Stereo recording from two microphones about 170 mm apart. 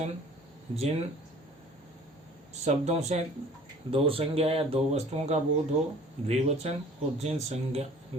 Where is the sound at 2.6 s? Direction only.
40° right (ahead or behind).